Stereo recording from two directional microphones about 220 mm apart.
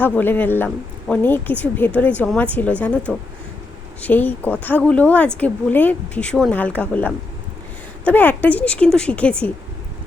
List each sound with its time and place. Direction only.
0.0 s a woman's voice: 10° left (ahead or behind)